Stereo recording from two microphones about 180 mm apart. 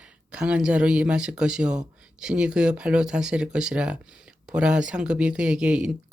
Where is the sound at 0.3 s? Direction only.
5° right (ahead or behind).